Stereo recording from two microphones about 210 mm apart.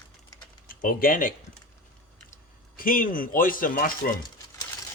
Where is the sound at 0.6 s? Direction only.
40° left (ahead or behind).